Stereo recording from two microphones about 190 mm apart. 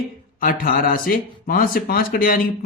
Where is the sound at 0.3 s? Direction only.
50° left (ahead or behind).